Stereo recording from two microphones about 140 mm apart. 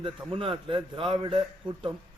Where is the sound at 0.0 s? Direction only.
35° right (ahead or behind).